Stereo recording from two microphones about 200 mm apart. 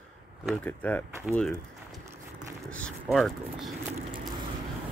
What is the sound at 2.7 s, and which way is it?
Speech, 5° left (ahead or behind).